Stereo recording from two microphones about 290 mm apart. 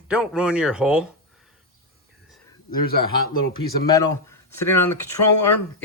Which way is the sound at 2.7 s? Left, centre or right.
Left.